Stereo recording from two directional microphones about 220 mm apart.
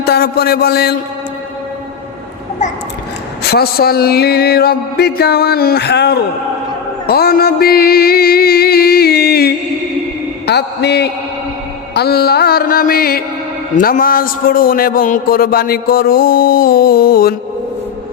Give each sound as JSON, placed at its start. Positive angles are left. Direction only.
{"t": 0.0, "sound": "a man's voice", "side_deg": 45}
{"t": 3.5, "sound": "a man's voice", "side_deg": 45}
{"t": 7.1, "sound": "music", "side_deg": 45}
{"t": 10.4, "sound": "a man's voice", "side_deg": 50}